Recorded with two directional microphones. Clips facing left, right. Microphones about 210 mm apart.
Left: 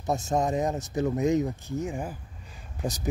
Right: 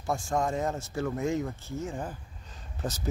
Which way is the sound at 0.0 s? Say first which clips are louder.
Left 3 dB; 20° left (ahead or behind).